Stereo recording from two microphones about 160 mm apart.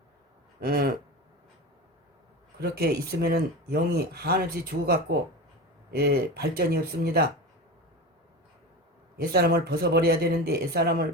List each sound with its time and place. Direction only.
0.6 s speech: 70° right (ahead or behind)
2.6 s speech: 75° right (ahead or behind)
6.0 s speech: 80° right
9.3 s speech: 80° right